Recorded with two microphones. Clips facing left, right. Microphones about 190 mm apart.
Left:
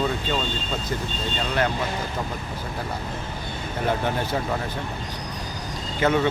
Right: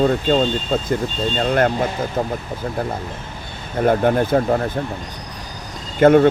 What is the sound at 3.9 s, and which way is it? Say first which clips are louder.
Speech: right 9 dB; 50° right (ahead or behind).